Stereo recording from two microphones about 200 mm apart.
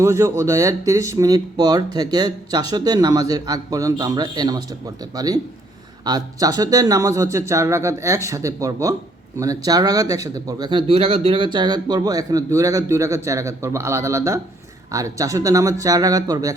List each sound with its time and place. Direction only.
0.0 s speech: 15° right (ahead or behind)